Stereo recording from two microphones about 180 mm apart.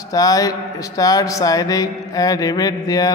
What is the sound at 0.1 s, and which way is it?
Speech, 20° left (ahead or behind).